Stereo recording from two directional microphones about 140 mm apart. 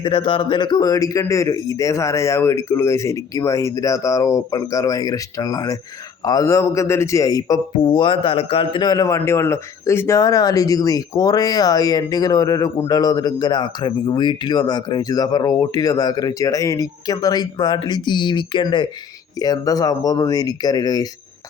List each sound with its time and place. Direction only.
0.0 s a man's voice: 35° left (ahead or behind)